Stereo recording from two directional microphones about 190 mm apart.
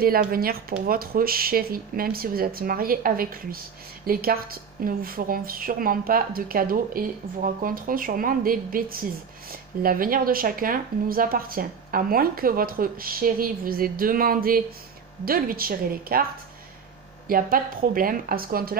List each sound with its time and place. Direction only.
0.0 s speech: 50° right (ahead or behind)
17.3 s speech: 50° right (ahead or behind)